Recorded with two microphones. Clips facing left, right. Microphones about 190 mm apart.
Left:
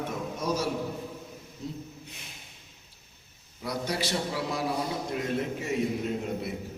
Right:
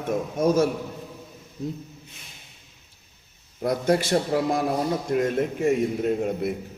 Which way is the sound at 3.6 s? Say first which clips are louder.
Right 9 dB; 50° right (ahead or behind).